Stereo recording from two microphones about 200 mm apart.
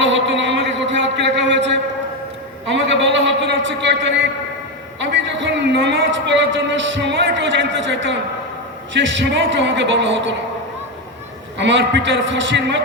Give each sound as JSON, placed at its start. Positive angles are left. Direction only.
{"t": 0.0, "sound": "a sound", "side_deg": -65}
{"t": 8.9, "sound": "a woman's voice", "side_deg": -65}
{"t": 11.5, "sound": "a woman's voice", "side_deg": -65}